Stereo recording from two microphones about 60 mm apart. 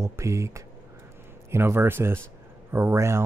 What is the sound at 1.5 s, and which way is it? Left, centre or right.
Speech, right.